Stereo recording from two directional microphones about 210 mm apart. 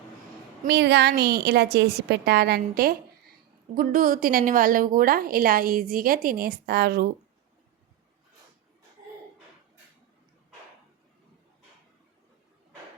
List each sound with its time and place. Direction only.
0.6 s a woman's voice: 50° right (ahead or behind)